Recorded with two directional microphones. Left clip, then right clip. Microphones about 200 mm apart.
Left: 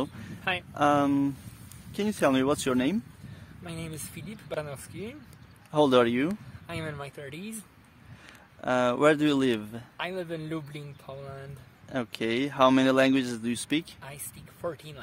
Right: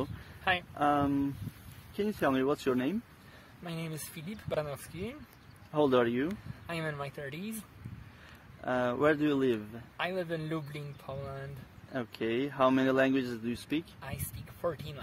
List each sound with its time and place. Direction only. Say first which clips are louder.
0.7 s speech: left 9 dB; 45° left (ahead or behind)
3.6 s a man's voice: left 1 dB; 15° left (ahead or behind)
5.7 s speech: left 5 dB; 45° left (ahead or behind)
6.7 s a man's voice: even; 15° left (ahead or behind)
8.5 s speech: left 5 dB; 45° left (ahead or behind)
9.9 s a man's voice: even; 10° left (ahead or behind)
11.9 s speech: left 4 dB; 45° left (ahead or behind)
14.0 s speech: even; 10° left (ahead or behind)